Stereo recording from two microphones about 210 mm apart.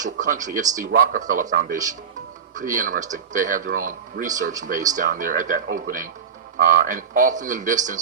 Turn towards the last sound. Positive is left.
turn(degrees=-35)  # may be behind; listen again after turning